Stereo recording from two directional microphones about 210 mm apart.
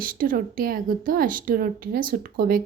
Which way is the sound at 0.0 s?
40° right (ahead or behind).